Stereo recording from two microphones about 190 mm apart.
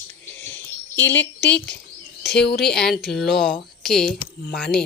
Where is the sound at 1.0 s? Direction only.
70° left (ahead or behind).